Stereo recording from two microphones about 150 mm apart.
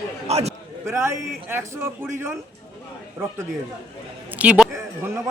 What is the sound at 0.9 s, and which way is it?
A man's voice, 15° right (ahead or behind).